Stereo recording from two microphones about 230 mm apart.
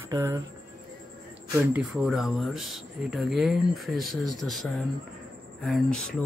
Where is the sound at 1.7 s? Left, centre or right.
Centre.